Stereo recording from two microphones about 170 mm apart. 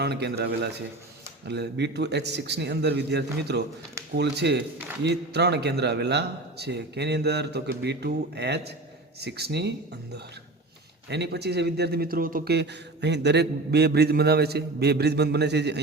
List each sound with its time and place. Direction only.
0.0 s a man's voice: 75° right (ahead or behind)
1.5 s a man's voice: 85° right
4.1 s a man's voice: 85° right
11.1 s a man's voice: 80° right; by 12.5 s 55° right (ahead or behind)
12.5 s a man's voice: 90° right